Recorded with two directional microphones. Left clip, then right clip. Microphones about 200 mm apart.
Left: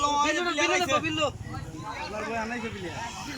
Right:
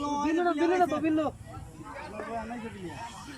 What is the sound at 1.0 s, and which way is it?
Speech, 55° right (ahead or behind).